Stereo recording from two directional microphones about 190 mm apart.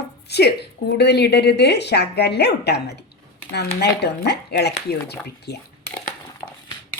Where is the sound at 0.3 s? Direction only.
60° left (ahead or behind).